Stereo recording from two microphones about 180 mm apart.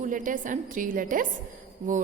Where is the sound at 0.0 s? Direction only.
45° right (ahead or behind).